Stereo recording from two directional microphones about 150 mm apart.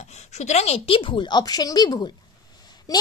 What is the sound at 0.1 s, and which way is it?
A woman's voice, 50° left (ahead or behind).